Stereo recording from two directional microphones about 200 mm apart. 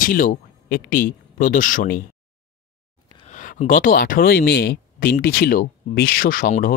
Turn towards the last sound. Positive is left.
turn(degrees=45)  # may be behind; listen again after turning